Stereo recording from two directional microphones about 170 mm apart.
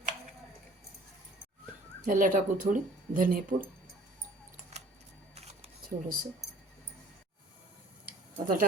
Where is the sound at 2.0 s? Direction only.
55° right (ahead or behind).